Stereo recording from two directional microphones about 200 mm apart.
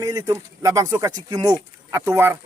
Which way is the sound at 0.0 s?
15° right (ahead or behind).